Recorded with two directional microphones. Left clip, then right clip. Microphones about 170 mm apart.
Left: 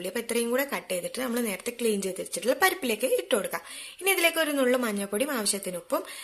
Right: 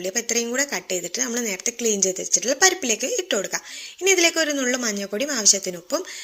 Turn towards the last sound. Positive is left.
turn(degrees=-10)  # may be behind; listen again after turning